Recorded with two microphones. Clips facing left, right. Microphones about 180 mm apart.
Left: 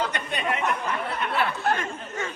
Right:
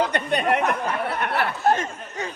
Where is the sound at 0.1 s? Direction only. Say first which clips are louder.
Right 7 dB; 60° right (ahead or behind).